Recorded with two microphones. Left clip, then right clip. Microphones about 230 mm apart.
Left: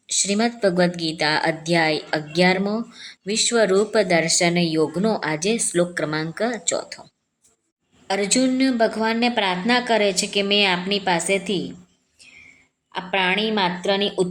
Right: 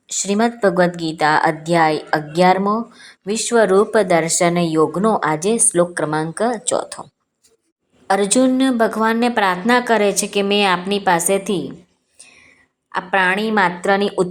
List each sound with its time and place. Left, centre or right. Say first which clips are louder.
0.1 s a woman's voice: right 3 dB; centre
8.0 s speech: right 5 dB; centre
12.2 s whispering: right 2 dB; centre
12.9 s speech: right 5 dB; centre